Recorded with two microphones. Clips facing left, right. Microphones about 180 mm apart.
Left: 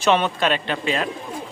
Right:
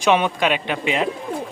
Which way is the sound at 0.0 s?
10° right (ahead or behind).